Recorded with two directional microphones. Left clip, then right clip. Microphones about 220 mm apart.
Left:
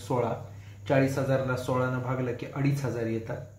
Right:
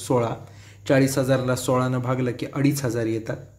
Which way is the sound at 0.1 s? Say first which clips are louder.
Right 5 dB; 60° right (ahead or behind).